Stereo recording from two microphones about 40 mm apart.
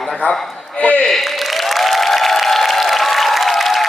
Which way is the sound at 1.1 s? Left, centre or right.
Centre.